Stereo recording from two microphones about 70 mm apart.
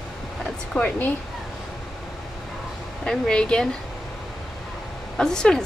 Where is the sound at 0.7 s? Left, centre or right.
Left.